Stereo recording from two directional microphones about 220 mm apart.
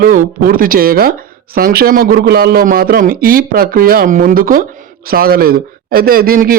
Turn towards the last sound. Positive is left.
turn(degrees=-40)  # may be behind; listen again after turning